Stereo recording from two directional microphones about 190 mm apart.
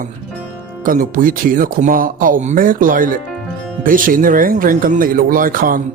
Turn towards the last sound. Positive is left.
turn(degrees=-45)  # may be behind; listen again after turning